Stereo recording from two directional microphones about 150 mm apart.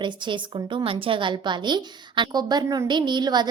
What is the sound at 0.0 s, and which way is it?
A woman's voice, 30° right (ahead or behind).